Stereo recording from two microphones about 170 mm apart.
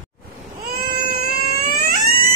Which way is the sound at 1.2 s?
65° right (ahead or behind).